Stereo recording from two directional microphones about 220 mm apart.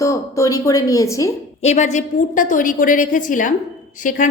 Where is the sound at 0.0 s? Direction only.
15° left (ahead or behind).